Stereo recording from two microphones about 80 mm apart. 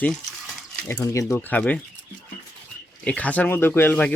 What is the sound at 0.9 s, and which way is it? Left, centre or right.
Speech, left.